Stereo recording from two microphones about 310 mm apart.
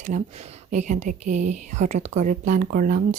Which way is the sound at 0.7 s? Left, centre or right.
Right.